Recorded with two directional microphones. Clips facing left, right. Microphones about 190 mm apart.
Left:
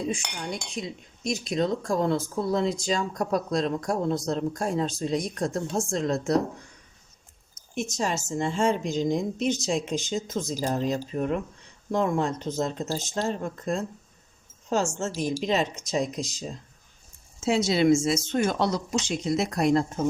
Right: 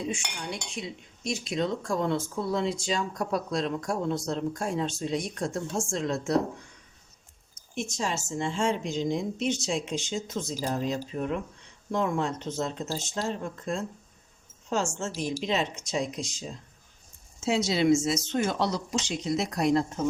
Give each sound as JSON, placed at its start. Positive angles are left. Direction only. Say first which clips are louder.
{"t": 0.5, "sound": "speech", "louder": "left 3 dB", "side_deg": 40}
{"t": 7.8, "sound": "speech", "louder": "left 3 dB", "side_deg": 45}
{"t": 17.4, "sound": "speech", "louder": "left 3 dB", "side_deg": 55}